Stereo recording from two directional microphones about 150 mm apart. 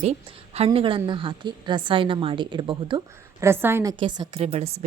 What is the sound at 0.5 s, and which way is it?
A woman's voice, 40° right (ahead or behind).